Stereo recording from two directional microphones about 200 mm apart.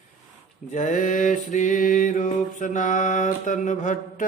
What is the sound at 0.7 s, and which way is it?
Mantra, 40° left (ahead or behind).